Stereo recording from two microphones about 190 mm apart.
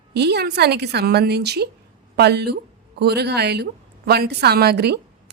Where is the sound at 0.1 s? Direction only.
60° right (ahead or behind).